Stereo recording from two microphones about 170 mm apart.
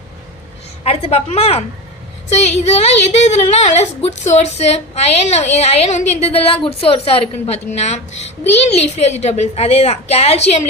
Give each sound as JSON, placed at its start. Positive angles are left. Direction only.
{"t": 0.9, "sound": "speech", "side_deg": 35}